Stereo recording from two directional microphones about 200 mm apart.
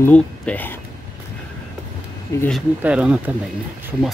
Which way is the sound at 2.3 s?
15° left (ahead or behind).